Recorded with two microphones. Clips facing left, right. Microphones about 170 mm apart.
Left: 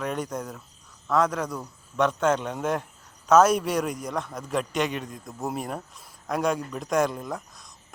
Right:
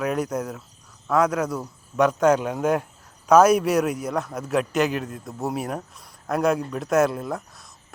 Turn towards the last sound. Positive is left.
turn(degrees=-5)  # may be behind; listen again after turning